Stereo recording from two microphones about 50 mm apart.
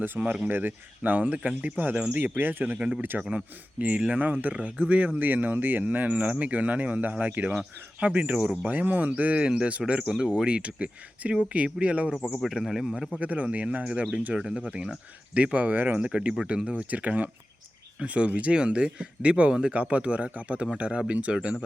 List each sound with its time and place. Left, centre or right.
0.4 s speech: right
2.7 s speech: centre
3.0 s speech: right
3.3 s speech: right
9.4 s speech: centre
10.1 s speech: centre
12.4 s speech: centre
13.1 s speech: right
15.5 s speech: right
16.0 s speech: right